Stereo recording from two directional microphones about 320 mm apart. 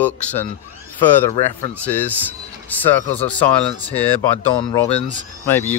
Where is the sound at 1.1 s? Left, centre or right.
Centre.